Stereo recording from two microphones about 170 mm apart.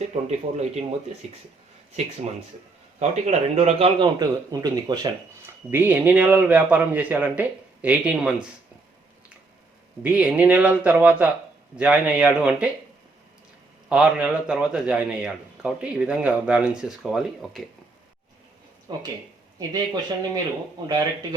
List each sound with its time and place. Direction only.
0.1 s speech: 40° right (ahead or behind)
3.0 s speech: 40° right (ahead or behind)
4.2 s speech: 25° right (ahead or behind)
5.7 s speech: 10° right (ahead or behind)
10.0 s speech: 5° right (ahead or behind)
13.9 s a man's voice: 5° right (ahead or behind)
18.9 s speech: 25° right (ahead or behind)